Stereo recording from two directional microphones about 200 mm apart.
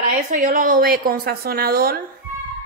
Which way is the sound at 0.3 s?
45° right (ahead or behind).